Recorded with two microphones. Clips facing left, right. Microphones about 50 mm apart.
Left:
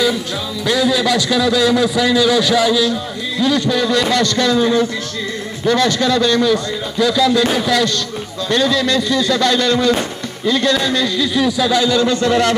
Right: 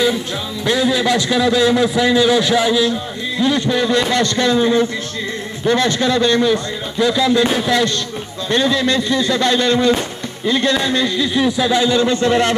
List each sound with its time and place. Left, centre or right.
0.7 s a man's voice: right